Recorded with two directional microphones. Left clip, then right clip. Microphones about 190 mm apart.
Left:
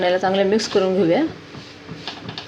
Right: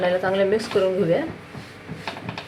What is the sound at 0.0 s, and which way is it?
Speech, 55° left (ahead or behind).